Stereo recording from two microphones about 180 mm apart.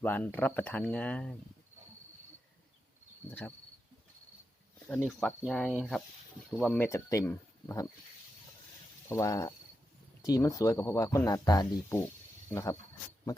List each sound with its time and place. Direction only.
0.0 s speech: 10° left (ahead or behind)
3.2 s speech: 10° left (ahead or behind)
5.5 s speech: centre (ahead or behind)
9.0 s speech: 15° left (ahead or behind)